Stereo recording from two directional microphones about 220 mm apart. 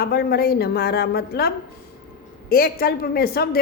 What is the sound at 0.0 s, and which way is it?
A woman's voice, 45° left (ahead or behind).